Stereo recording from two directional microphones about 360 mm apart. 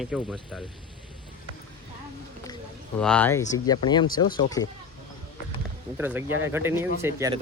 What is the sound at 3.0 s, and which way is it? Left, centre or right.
Speech, centre.